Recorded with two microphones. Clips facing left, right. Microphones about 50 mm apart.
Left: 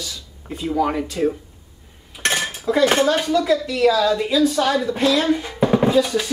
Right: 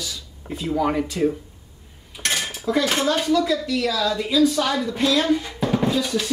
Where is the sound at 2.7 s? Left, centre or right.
Centre.